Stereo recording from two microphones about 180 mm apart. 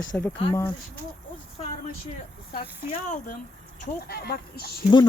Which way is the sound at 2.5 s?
40° left (ahead or behind).